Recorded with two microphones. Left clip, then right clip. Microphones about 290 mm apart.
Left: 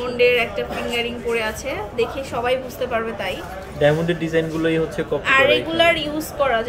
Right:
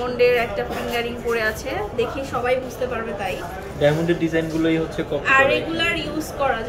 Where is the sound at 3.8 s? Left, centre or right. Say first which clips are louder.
Left 1 dB; centre.